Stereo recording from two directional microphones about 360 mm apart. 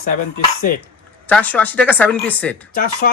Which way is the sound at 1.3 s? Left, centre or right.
Centre.